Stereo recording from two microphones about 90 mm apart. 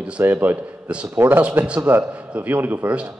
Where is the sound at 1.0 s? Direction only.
25° right (ahead or behind).